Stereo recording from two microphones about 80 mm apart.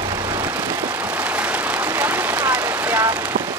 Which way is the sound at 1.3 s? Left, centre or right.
Right.